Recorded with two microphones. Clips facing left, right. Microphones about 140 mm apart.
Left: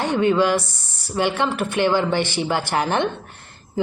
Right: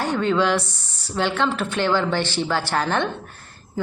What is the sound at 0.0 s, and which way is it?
Speech, 15° left (ahead or behind).